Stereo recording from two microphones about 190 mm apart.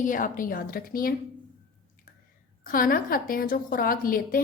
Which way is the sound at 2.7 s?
50° left (ahead or behind).